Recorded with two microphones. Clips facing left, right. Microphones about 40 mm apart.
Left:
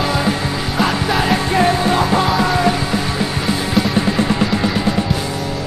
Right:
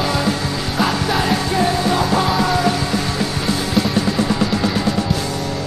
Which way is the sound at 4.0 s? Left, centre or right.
Left.